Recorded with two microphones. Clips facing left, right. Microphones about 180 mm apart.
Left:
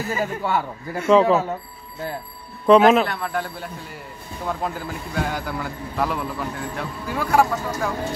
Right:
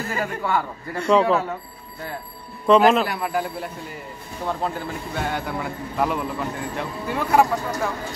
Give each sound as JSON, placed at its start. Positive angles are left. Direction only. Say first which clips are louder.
{"t": 0.1, "sound": "a man's voice", "louder": "left 1 dB", "side_deg": 10}
{"t": 2.6, "sound": "a man's voice", "louder": "left 2 dB", "side_deg": 0}